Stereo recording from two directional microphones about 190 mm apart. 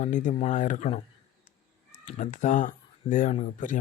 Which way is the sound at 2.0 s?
40° left (ahead or behind).